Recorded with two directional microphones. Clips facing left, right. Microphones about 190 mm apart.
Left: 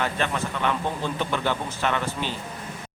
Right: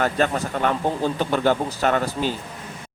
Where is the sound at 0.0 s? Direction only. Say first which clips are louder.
Right 5 dB; 45° right (ahead or behind).